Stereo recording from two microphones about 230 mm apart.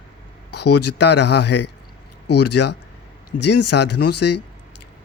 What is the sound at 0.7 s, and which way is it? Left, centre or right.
Speech, left.